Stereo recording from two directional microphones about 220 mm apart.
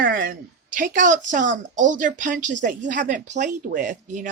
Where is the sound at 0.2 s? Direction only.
40° right (ahead or behind).